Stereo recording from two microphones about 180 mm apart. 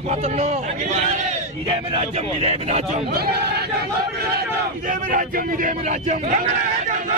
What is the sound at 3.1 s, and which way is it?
Speech, 65° right (ahead or behind).